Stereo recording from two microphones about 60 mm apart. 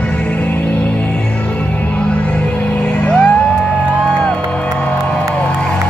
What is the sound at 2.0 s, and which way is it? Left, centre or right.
Music, centre.